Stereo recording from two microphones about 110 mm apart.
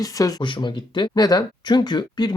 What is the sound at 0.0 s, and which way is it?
Speech, 35° left (ahead or behind).